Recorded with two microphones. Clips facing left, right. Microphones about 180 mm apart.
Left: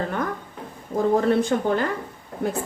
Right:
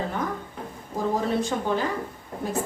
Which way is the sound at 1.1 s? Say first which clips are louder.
Left 6 dB; 55° left (ahead or behind).